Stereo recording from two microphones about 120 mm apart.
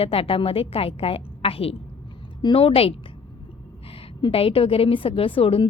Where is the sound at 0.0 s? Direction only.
50° left (ahead or behind).